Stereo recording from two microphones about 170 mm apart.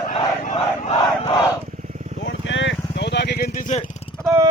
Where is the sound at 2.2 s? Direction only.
90° left; by 3.8 s 50° left (ahead or behind).